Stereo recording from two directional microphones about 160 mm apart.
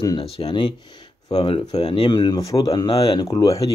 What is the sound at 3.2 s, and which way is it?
Speech, 20° left (ahead or behind).